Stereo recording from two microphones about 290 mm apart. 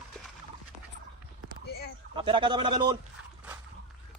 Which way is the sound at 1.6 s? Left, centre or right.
Left.